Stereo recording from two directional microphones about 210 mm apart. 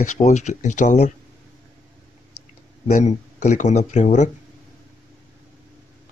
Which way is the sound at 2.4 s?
90° left.